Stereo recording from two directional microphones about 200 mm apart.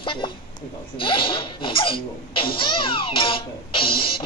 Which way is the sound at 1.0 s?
25° left (ahead or behind).